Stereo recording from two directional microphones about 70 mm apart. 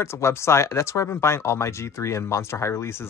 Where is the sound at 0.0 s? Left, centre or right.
Left.